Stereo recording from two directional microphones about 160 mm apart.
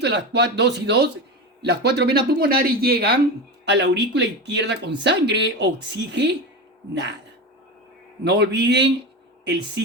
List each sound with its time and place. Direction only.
0.0 s speech: 90° right; by 3.2 s 75° right (ahead or behind)
3.7 s speech: 90° right
8.2 s speech: 90° right